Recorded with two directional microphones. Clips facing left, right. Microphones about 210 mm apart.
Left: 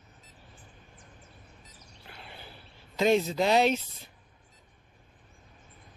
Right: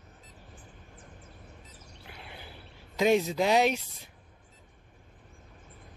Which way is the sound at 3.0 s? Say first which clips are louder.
Even; 10° right (ahead or behind).